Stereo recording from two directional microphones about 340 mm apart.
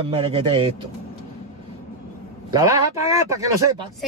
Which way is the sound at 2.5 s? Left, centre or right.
Centre.